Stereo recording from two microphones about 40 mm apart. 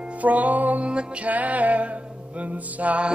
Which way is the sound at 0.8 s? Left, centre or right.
Right.